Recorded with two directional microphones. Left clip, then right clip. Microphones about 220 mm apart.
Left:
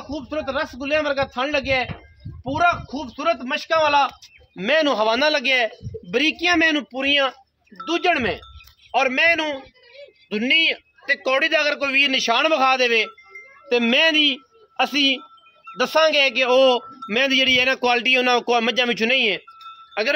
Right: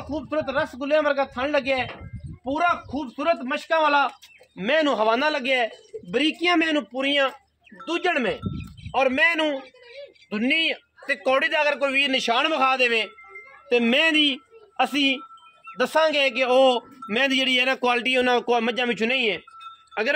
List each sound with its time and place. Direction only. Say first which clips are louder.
0.1 s a man's voice: even; 25° left (ahead or behind); by 20.2 s 45° left (ahead or behind)